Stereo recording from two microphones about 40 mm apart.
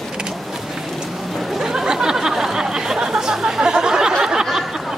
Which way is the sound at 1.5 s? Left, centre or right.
Centre.